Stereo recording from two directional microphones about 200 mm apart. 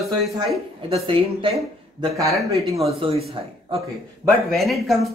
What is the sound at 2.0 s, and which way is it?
Speech, 15° right (ahead or behind).